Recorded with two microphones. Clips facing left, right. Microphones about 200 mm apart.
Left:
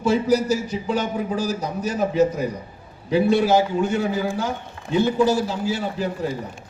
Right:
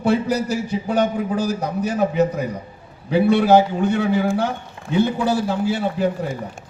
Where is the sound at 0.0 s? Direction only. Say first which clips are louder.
Even; 60° right (ahead or behind).